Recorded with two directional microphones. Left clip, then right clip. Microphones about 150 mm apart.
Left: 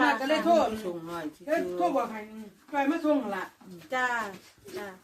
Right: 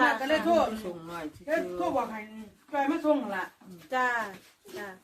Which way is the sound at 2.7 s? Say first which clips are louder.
Even; 40° left (ahead or behind).